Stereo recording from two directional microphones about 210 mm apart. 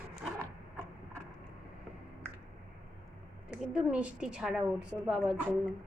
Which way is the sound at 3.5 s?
5° right (ahead or behind).